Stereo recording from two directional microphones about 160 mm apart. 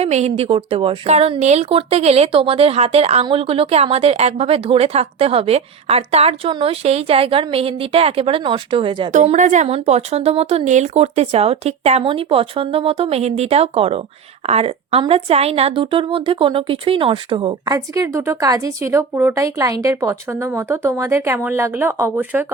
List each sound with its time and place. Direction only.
0.0 s speech: 45° right (ahead or behind)
9.1 s a woman's voice: 50° right (ahead or behind); by 22.5 s 10° right (ahead or behind)